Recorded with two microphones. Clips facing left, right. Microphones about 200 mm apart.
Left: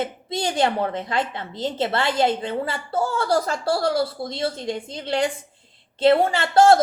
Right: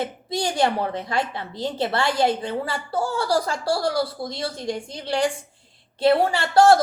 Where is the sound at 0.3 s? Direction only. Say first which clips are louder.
Even; 25° left (ahead or behind).